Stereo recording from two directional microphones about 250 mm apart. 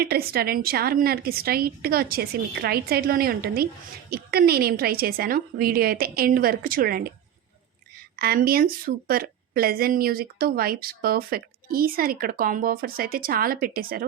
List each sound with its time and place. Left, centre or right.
0.0 s a woman's voice: right
8.1 s a woman's voice: right